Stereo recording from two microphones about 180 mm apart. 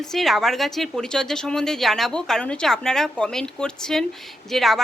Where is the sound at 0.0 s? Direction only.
Centre (ahead or behind).